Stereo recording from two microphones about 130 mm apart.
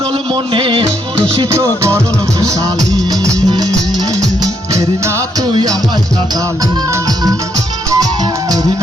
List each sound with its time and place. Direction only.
0.5 s music: 40° right (ahead or behind)
1.5 s music: 20° right (ahead or behind)
3.1 s music: 30° right (ahead or behind)
4.7 s music: 25° right (ahead or behind)
7.9 s music: 30° right (ahead or behind)